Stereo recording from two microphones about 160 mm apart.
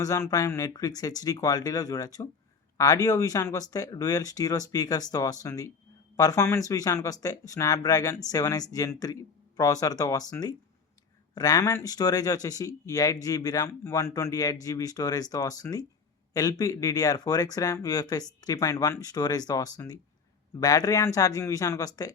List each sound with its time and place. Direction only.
0.0 s speech: 20° left (ahead or behind)